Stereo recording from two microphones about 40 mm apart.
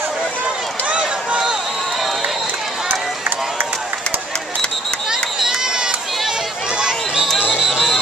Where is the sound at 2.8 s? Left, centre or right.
Right.